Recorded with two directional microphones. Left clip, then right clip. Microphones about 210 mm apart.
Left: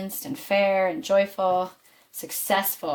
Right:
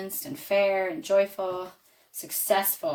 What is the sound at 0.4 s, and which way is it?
Speech, 35° left (ahead or behind).